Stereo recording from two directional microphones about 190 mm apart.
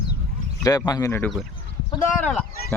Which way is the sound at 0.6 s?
20° left (ahead or behind).